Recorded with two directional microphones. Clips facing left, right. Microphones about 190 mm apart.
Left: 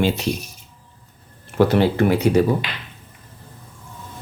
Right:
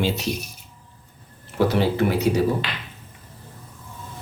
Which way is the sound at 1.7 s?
60° left (ahead or behind).